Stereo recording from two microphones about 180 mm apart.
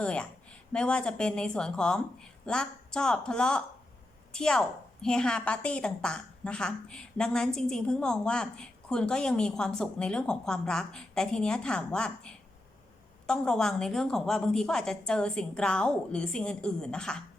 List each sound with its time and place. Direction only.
0.0 s a woman's voice: 5° left (ahead or behind)